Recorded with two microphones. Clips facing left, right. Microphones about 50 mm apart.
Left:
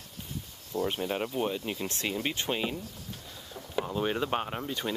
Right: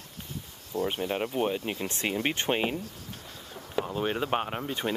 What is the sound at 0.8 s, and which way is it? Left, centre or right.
Speech, centre.